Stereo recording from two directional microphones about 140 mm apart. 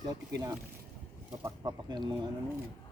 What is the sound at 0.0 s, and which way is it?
Speech, 25° right (ahead or behind).